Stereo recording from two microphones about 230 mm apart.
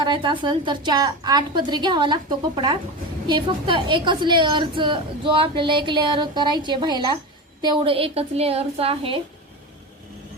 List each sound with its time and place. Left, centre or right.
0.0 s a woman's voice: right
3.2 s a woman's voice: right